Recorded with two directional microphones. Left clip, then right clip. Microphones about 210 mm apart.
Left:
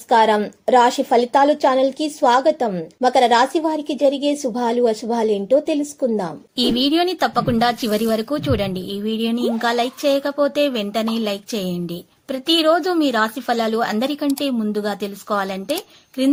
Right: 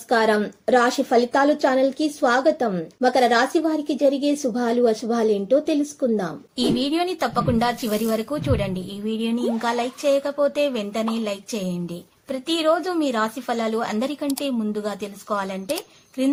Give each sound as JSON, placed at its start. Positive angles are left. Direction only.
{"t": 0.1, "sound": "a woman's voice", "side_deg": 15}